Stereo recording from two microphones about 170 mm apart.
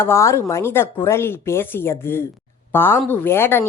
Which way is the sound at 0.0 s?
15° left (ahead or behind).